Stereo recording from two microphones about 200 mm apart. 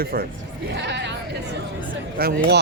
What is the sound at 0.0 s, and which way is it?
Speech, 50° right (ahead or behind).